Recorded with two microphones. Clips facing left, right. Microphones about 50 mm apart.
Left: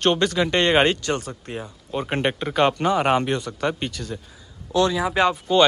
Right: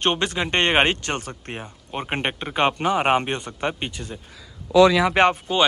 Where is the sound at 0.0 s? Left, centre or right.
Right.